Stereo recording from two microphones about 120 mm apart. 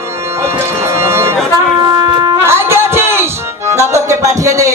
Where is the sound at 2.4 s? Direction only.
20° right (ahead or behind).